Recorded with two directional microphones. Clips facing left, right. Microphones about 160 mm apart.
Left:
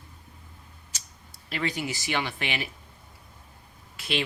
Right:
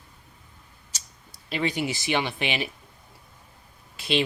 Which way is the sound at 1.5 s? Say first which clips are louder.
Right 4 dB; 25° right (ahead or behind).